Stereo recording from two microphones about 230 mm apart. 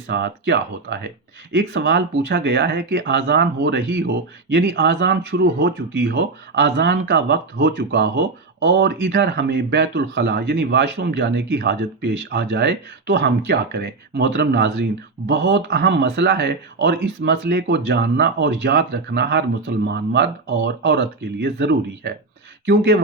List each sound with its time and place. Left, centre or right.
0.1 s speech: right